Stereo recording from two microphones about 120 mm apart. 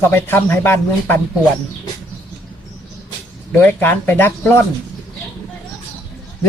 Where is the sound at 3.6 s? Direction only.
15° left (ahead or behind).